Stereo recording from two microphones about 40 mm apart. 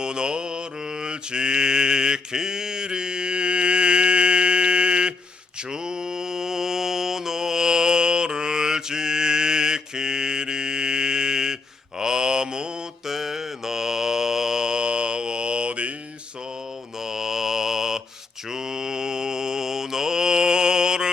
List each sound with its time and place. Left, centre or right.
0.0 s mantra: right
13.1 s mantra: centre; by 15.9 s right
17.0 s mantra: centre